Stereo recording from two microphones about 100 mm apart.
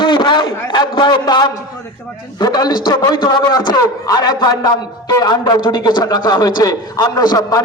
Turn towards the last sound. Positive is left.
turn(degrees=40)  # may be behind; listen again after turning